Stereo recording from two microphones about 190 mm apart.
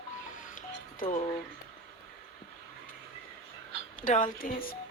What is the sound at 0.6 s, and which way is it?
Music, 40° left (ahead or behind).